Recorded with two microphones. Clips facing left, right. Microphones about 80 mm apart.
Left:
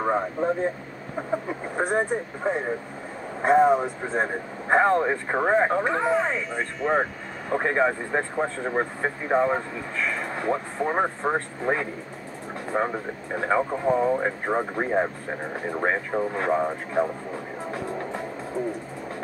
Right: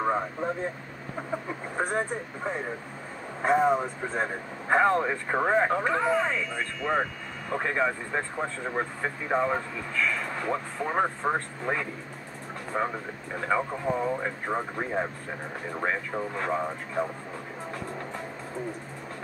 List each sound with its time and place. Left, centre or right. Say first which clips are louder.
0.0 s vehicle: left 3 dB; centre
1.3 s speech: left 5 dB; centre